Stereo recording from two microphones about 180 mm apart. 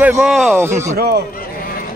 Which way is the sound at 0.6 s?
15° right (ahead or behind).